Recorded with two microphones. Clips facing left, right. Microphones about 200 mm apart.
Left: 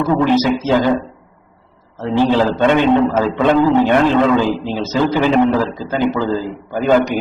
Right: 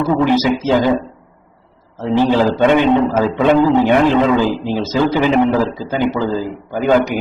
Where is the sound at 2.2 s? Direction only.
15° right (ahead or behind).